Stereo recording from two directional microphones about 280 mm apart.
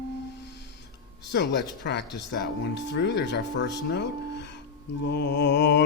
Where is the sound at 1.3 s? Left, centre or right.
Left.